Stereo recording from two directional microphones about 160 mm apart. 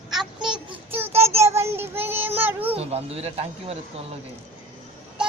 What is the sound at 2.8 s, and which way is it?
Speech, 40° right (ahead or behind).